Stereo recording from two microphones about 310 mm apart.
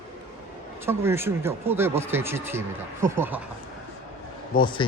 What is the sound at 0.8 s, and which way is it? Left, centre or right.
Speech, centre.